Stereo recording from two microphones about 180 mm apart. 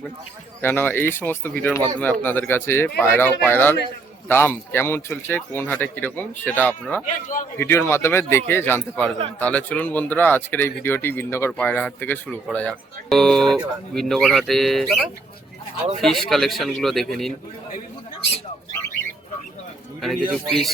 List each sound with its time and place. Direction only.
0.6 s speech: 10° left (ahead or behind)
7.0 s a man's voice: 45° left (ahead or behind)
7.6 s speech: 15° left (ahead or behind)
16.0 s speech: centre (ahead or behind)
20.0 s speech: centre (ahead or behind)